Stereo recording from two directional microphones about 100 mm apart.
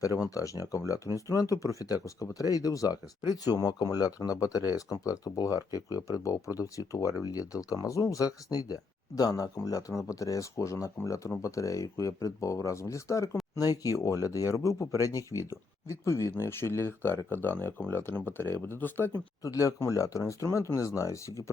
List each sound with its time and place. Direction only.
0.0 s speech: 35° left (ahead or behind); by 19.1 s 20° left (ahead or behind)
19.4 s speech: 35° left (ahead or behind)